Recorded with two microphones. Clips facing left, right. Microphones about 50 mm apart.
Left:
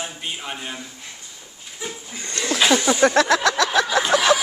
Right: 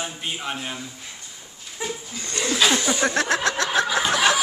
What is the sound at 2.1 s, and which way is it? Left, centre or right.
Speech, left.